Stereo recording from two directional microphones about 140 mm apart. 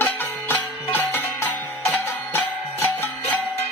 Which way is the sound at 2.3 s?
15° left (ahead or behind).